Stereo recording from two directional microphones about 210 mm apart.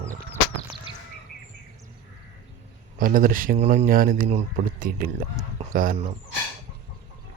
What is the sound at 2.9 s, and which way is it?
Speech, 40° right (ahead or behind).